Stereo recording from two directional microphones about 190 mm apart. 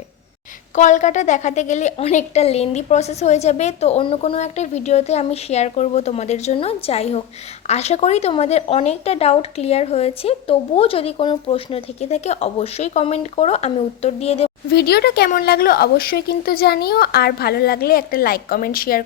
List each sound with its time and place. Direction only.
0.8 s a woman's voice: 40° left (ahead or behind)
14.7 s speech: 60° left (ahead or behind)